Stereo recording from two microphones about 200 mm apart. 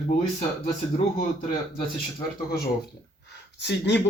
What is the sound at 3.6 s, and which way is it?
Speech, 60° left (ahead or behind).